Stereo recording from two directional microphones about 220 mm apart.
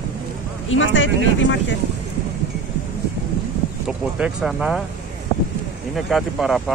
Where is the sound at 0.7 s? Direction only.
60° left (ahead or behind).